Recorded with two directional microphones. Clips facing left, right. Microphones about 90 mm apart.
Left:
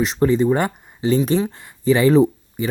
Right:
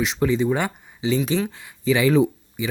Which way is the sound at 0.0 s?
40° left (ahead or behind).